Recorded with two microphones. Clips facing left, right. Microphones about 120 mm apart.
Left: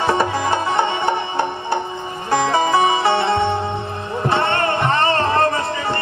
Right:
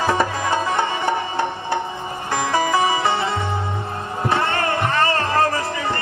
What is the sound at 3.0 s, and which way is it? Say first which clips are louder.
Music: left 3 dB; 65° left (ahead or behind).